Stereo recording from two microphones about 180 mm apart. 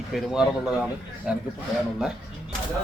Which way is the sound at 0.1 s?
Centre (ahead or behind).